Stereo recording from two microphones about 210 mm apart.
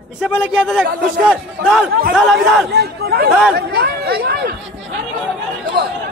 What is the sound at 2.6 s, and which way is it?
Speech, 50° right (ahead or behind).